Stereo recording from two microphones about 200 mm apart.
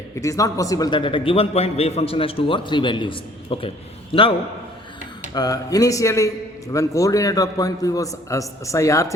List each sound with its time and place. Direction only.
0.2 s a man's voice: 15° left (ahead or behind)
5.3 s a man's voice: 20° left (ahead or behind)